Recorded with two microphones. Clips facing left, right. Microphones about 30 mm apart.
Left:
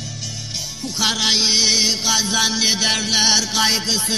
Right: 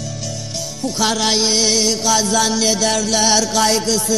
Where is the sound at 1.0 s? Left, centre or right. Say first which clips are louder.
Right 1 dB; centre; by 3.3 s left.